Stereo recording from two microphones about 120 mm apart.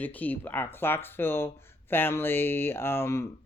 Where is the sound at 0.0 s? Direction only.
15° left (ahead or behind).